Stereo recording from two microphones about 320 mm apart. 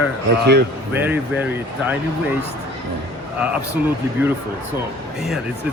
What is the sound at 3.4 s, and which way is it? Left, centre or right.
Speech, centre.